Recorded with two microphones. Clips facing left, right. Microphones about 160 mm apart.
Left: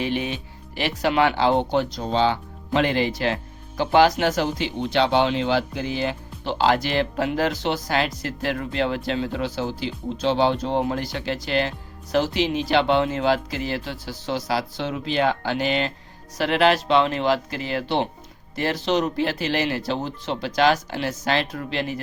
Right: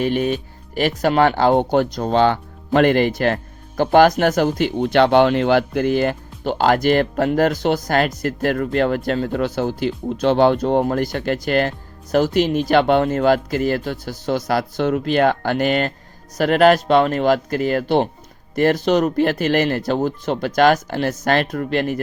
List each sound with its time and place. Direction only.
0.0 s speech: 45° right (ahead or behind)